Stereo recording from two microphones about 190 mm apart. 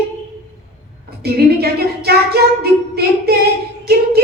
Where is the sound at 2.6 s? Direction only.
55° right (ahead or behind).